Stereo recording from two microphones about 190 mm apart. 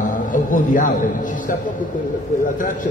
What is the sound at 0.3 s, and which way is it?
A man's voice, 45° left (ahead or behind).